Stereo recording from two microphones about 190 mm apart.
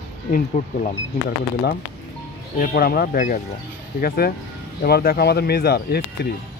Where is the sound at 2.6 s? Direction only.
55° left (ahead or behind).